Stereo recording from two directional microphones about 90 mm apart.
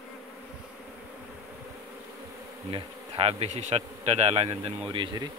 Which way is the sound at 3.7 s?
90° right.